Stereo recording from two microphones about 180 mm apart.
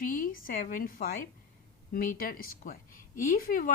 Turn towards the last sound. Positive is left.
turn(degrees=50)  # may be behind; listen again after turning